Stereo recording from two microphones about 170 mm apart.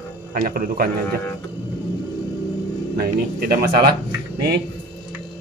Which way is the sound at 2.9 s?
60° right (ahead or behind).